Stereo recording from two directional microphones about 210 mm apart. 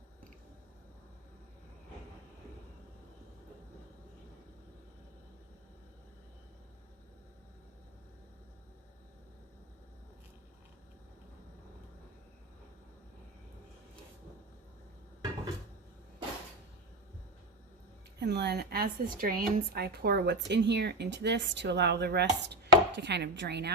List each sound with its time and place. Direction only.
18.2 s speech: 50° right (ahead or behind)